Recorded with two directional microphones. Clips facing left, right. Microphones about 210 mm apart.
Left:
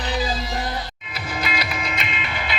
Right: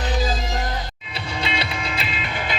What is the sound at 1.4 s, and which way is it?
Music, 30° right (ahead or behind).